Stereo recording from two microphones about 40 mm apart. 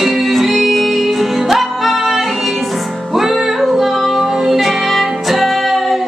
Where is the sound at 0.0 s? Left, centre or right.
Centre.